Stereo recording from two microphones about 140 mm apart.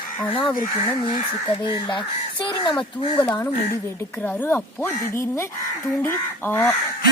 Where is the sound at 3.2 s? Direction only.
10° left (ahead or behind).